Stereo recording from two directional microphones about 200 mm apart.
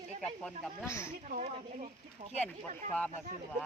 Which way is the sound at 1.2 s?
30° right (ahead or behind).